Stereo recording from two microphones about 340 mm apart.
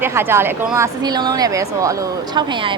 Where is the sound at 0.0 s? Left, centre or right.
Centre.